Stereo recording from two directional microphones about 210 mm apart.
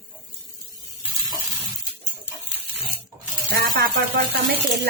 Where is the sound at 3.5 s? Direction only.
45° right (ahead or behind).